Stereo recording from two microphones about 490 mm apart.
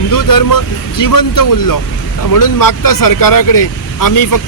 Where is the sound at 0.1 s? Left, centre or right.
Left.